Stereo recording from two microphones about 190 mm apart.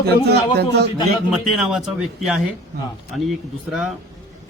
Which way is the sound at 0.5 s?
60° right (ahead or behind).